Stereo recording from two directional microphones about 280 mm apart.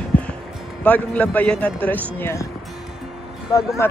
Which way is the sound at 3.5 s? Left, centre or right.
Centre.